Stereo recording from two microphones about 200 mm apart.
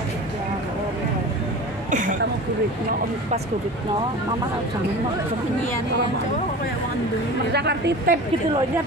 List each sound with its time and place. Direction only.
1.9 s speech: 40° right (ahead or behind)
7.5 s a woman's voice: 55° right (ahead or behind)